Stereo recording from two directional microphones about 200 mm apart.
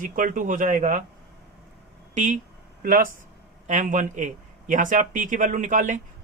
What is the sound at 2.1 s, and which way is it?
Speech, 35° right (ahead or behind).